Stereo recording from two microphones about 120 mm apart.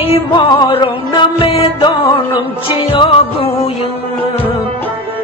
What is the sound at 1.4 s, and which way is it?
Music, 50° left (ahead or behind).